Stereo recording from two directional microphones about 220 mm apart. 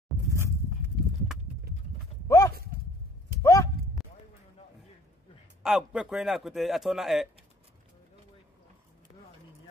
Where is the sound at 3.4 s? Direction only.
15° left (ahead or behind).